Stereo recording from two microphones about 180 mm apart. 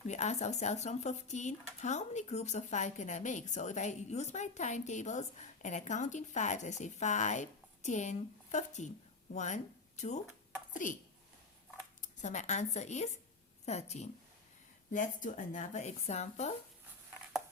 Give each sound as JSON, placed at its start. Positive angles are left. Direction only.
{"t": 0.1, "sound": "a woman's voice", "side_deg": 40}
{"t": 12.0, "sound": "speech", "side_deg": 40}